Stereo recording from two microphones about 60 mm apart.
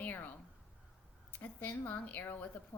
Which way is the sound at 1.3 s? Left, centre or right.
Left.